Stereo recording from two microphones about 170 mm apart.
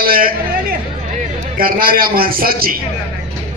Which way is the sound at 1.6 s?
60° right (ahead or behind).